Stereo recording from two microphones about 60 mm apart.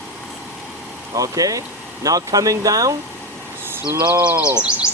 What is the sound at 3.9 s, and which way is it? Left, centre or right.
Speech, right.